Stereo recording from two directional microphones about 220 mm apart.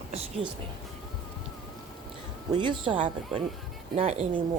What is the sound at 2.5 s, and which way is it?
Speech, 20° right (ahead or behind).